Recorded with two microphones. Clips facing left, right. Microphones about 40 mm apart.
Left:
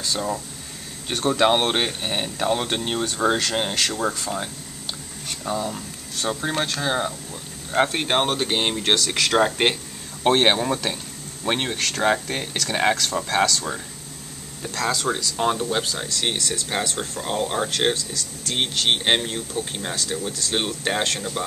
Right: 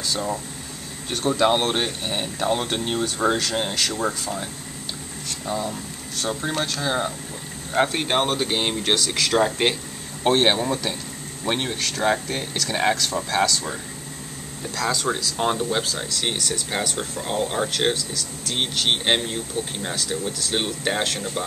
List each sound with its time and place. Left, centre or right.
1.4 s speech: left; by 3.8 s centre
3.8 s speech: centre
5.4 s speech: centre
9.1 s speech: centre
14.6 s speech: centre